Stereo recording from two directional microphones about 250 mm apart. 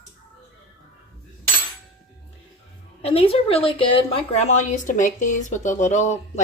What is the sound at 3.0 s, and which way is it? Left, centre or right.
Speech, left.